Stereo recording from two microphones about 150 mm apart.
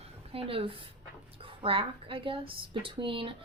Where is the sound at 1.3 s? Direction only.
35° right (ahead or behind).